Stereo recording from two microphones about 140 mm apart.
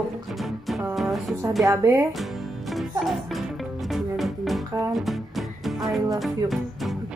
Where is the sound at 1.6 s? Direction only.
20° right (ahead or behind).